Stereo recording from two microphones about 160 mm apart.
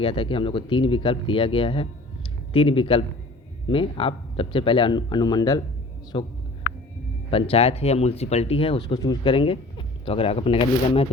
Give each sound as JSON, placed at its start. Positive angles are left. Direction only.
{"t": 0.0, "sound": "speech", "side_deg": 35}